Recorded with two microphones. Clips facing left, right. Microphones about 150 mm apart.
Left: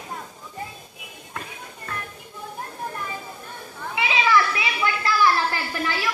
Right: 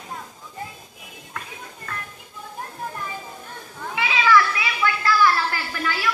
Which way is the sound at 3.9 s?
20° left (ahead or behind).